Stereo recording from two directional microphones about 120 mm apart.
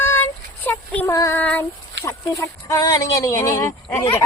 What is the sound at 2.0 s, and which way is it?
Speech, 25° left (ahead or behind).